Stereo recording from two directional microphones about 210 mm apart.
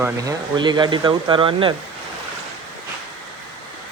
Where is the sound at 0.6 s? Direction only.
20° right (ahead or behind).